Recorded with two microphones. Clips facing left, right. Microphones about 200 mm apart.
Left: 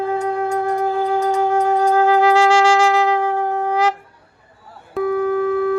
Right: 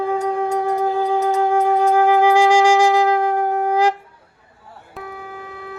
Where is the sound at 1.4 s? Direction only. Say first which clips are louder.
Right 1 dB; 15° right (ahead or behind).